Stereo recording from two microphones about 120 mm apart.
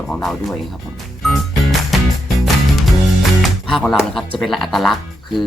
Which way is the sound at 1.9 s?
Centre (ahead or behind).